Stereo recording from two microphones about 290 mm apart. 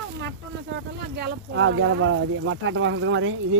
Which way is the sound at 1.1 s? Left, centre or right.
Right.